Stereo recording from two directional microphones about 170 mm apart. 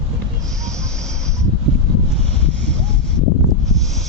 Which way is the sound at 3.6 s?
Centre (ahead or behind).